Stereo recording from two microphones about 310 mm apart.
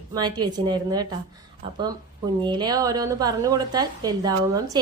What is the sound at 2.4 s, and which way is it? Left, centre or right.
A woman's voice, centre.